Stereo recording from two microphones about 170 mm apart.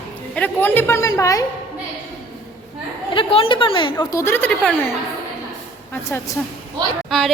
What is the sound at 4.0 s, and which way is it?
Speech, 15° left (ahead or behind).